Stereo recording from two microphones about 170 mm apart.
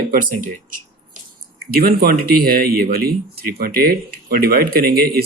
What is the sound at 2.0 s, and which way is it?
Speech, 65° right (ahead or behind).